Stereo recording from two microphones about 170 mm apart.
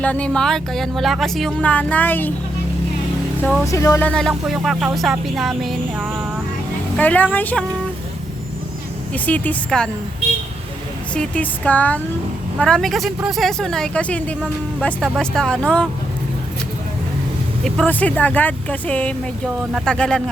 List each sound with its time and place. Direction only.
0.0 s speech: 5° left (ahead or behind)
3.4 s speech: centre (ahead or behind)
3.7 s speech: 20° left (ahead or behind)
4.1 s speech: centre (ahead or behind)
9.1 s speech: 10° left (ahead or behind)
11.1 s speech: 5° left (ahead or behind)
17.6 s speech: 5° left (ahead or behind)